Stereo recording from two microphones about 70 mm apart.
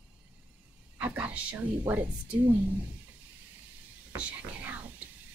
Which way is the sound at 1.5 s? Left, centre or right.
Right.